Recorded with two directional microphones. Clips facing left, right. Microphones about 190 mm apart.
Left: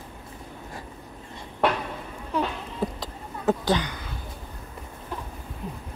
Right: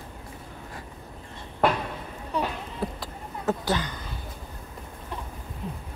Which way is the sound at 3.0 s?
15° left (ahead or behind).